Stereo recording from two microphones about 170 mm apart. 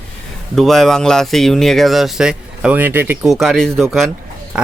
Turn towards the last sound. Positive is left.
turn(degrees=-5)  # may be behind; listen again after turning